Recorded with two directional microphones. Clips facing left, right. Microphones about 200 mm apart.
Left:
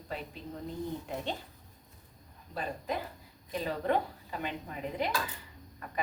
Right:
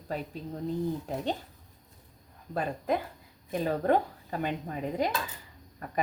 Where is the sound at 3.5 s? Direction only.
45° right (ahead or behind).